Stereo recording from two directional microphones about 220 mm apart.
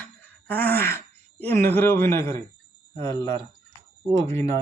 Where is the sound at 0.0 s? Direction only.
5° left (ahead or behind).